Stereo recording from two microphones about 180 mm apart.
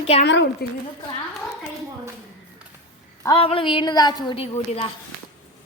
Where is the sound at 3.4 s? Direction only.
30° left (ahead or behind).